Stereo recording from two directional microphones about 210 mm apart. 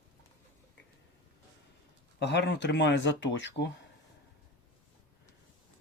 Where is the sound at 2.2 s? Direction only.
55° left (ahead or behind).